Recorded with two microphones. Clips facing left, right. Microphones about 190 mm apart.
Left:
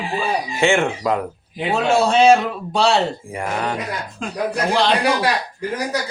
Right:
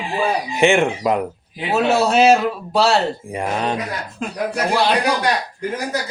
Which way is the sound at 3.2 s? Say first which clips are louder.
Right 2 dB; 20° right (ahead or behind).